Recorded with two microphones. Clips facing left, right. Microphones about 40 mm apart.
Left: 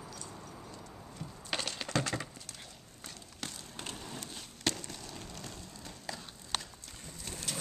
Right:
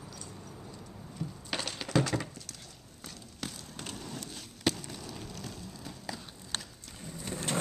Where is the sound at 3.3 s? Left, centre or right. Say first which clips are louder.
Right 2 dB; centre.